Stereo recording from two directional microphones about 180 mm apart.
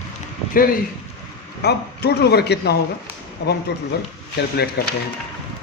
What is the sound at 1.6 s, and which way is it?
Speech, 65° left (ahead or behind).